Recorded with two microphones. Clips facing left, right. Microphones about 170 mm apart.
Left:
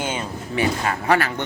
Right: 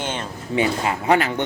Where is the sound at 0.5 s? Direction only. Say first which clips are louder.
Right 1 dB; 20° right (ahead or behind).